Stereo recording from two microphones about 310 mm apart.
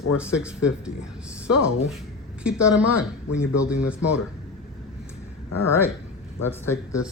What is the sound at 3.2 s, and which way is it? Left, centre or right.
Speech, left.